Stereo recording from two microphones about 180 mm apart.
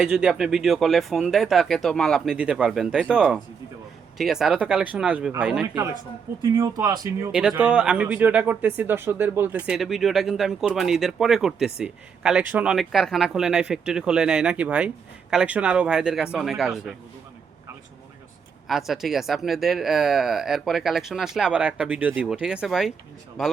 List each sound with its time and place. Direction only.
0.0 s speech: 5° right (ahead or behind)
6.6 s speech: 20° right (ahead or behind)
7.3 s speech: 5° right (ahead or behind)
18.7 s speech: centre (ahead or behind)